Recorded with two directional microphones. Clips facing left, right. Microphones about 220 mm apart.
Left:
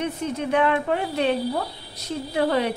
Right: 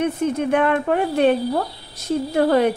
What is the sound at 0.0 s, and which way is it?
A woman's voice, 50° right (ahead or behind).